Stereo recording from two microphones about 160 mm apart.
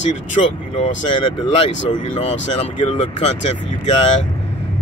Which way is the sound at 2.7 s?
40° left (ahead or behind).